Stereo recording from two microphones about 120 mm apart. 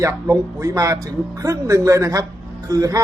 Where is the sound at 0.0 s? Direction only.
25° right (ahead or behind).